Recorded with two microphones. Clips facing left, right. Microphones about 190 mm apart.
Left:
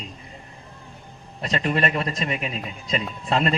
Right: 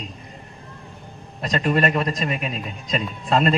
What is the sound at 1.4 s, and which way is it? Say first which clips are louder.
A man's voice: right 3 dB; 40° right (ahead or behind).